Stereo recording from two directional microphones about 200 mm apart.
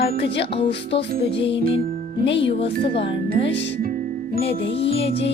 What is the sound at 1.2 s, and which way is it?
Music, 60° left (ahead or behind).